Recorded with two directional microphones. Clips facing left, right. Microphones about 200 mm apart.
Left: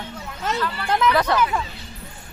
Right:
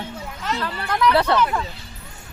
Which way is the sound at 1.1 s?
30° right (ahead or behind).